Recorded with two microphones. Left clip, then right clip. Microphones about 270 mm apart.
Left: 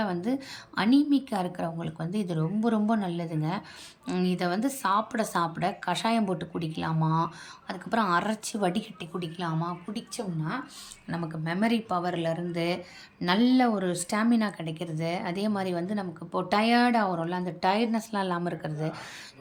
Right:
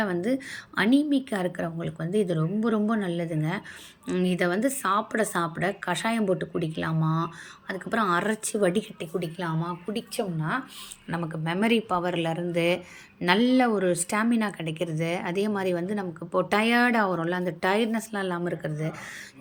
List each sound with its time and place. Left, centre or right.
0.0 s speech: centre